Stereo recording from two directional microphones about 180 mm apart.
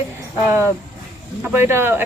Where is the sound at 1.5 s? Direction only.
15° right (ahead or behind).